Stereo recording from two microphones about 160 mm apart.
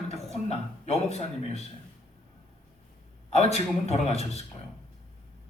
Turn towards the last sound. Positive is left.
turn(degrees=40)  # may be behind; listen again after turning